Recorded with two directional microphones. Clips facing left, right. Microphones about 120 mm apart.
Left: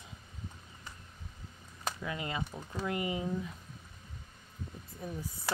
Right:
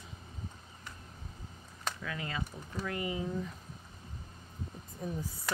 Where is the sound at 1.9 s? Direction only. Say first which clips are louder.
Left 2 dB; 20° left (ahead or behind).